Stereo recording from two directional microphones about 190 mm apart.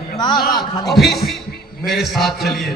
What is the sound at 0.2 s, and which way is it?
Speech, 25° left (ahead or behind).